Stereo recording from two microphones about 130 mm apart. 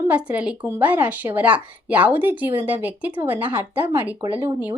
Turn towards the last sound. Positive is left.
turn(degrees=-15)  # may be behind; listen again after turning